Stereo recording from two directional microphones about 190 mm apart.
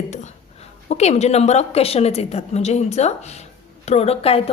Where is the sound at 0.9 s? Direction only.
35° left (ahead or behind).